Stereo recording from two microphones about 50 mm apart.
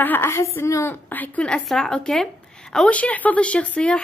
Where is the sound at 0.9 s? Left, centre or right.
Left.